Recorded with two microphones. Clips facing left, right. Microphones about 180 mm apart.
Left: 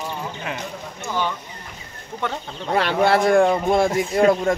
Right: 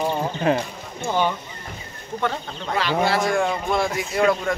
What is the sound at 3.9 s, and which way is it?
Speech, 30° left (ahead or behind).